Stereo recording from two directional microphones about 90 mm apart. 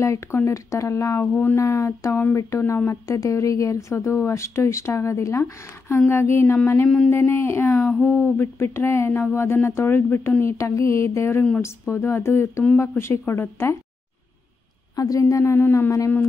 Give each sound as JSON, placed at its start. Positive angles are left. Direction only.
{"t": 0.0, "sound": "speech", "side_deg": 35}
{"t": 1.2, "sound": "speech", "side_deg": 20}
{"t": 1.6, "sound": "speech", "side_deg": 35}
{"t": 15.0, "sound": "speech", "side_deg": 40}
{"t": 15.4, "sound": "speech", "side_deg": 25}